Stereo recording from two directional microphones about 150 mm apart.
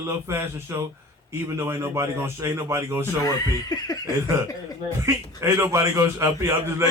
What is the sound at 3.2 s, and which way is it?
Speech, 25° left (ahead or behind).